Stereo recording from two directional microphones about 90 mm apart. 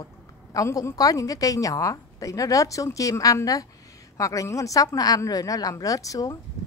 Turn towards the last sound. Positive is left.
turn(degrees=40)  # may be behind; listen again after turning